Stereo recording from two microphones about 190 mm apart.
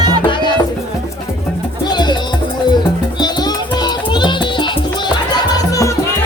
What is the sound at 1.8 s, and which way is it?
Music, 20° left (ahead or behind).